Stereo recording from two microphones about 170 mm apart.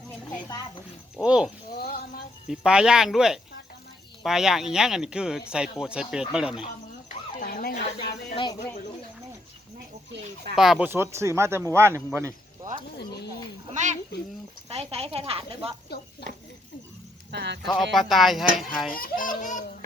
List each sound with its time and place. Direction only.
1.1 s speech: 5° right (ahead or behind)
1.8 s a sound: 65° left (ahead or behind)
2.5 s speech: 5° right (ahead or behind)
7.3 s a sound: 60° left (ahead or behind)
10.5 s speech: 5° right (ahead or behind)
13.7 s a woman's voice: 45° right (ahead or behind)
17.3 s speech: 85° right
17.9 s speech: centre (ahead or behind)
18.9 s a child's voice: 55° left (ahead or behind)